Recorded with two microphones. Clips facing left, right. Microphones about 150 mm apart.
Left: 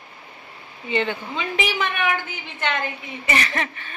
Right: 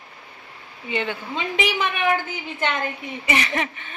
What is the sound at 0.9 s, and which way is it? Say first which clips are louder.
Speech: left 3 dB; 10° right (ahead or behind).